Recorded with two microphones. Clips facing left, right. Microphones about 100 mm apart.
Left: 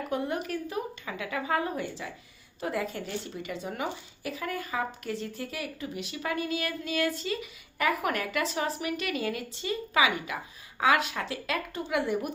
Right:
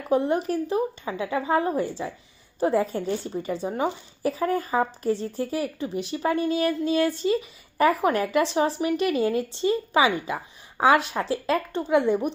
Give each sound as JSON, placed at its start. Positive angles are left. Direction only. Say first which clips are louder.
{"t": 0.1, "sound": "a woman's voice", "louder": "right 10 dB", "side_deg": -30}